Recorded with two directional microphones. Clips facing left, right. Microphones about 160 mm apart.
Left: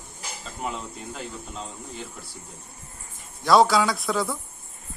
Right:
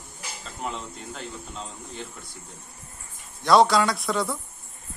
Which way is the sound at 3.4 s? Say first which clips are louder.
Even; centre (ahead or behind).